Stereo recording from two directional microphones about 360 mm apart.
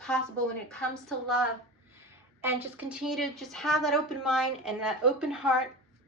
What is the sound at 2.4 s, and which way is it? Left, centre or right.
A woman's voice, centre.